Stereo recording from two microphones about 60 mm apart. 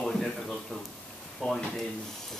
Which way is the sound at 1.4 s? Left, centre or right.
Centre.